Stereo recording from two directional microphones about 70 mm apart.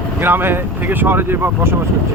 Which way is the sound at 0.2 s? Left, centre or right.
Right.